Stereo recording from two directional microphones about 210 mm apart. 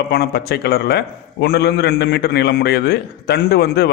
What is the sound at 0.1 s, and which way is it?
A man's voice, 50° left (ahead or behind).